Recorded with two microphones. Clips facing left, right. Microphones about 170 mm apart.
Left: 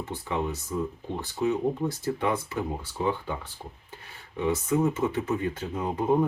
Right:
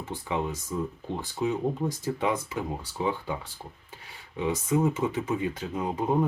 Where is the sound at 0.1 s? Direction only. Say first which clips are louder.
Right 1 dB; 15° right (ahead or behind).